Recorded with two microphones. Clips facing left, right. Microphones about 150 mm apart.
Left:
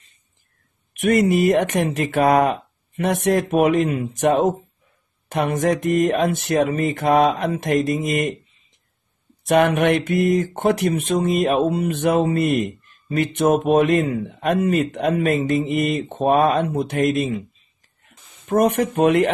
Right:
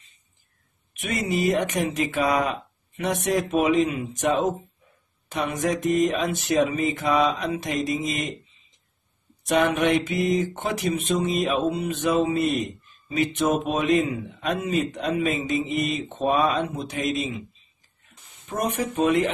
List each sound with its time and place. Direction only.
0.9 s speech: 55° left (ahead or behind)
9.4 s speech: 60° left (ahead or behind)
18.5 s speech: 60° left (ahead or behind)